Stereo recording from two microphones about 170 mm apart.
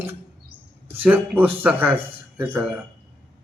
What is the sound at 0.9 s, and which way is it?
A man's voice, 10° right (ahead or behind).